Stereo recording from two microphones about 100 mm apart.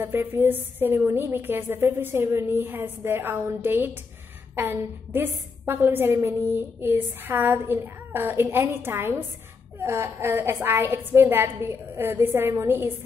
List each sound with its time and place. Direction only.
0.0 s a woman's voice: 20° right (ahead or behind)